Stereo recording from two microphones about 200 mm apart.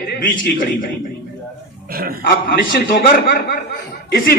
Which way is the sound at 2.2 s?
45° left (ahead or behind).